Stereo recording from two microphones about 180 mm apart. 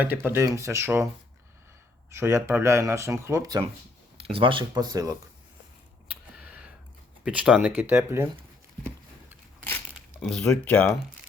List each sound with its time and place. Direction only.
0.0 s speech: 10° right (ahead or behind)
2.0 s speech: 15° right (ahead or behind)
4.2 s speech: 30° right (ahead or behind)
6.3 s a sound: 5° right (ahead or behind)
7.3 s speech: 5° right (ahead or behind)
10.2 s speech: 5° left (ahead or behind)